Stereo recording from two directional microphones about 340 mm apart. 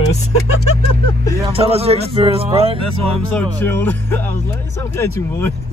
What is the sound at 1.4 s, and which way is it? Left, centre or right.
Speech, centre.